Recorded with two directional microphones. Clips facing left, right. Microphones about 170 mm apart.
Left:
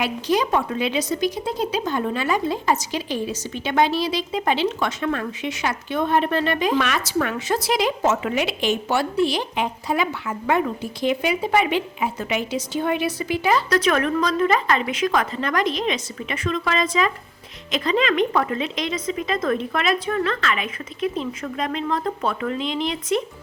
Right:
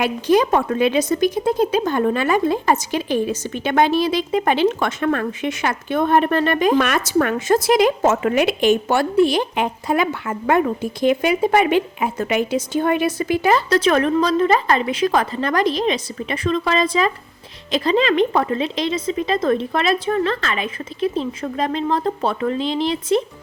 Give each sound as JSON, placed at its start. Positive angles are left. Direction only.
{"t": 0.0, "sound": "speech", "side_deg": -50}
{"t": 13.7, "sound": "a woman's voice", "side_deg": -30}